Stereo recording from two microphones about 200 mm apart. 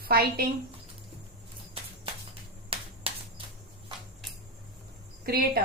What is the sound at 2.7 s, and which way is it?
Finger snapping, 30° right (ahead or behind).